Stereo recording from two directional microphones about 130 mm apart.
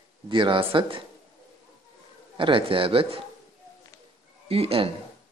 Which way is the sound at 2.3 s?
40° right (ahead or behind).